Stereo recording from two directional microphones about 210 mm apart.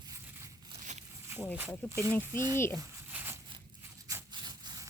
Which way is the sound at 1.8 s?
5° left (ahead or behind).